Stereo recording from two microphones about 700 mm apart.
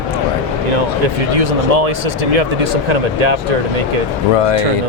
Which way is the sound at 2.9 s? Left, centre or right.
Right.